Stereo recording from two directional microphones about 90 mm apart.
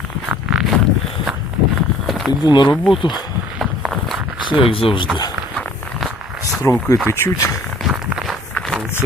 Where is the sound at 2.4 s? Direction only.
55° left (ahead or behind).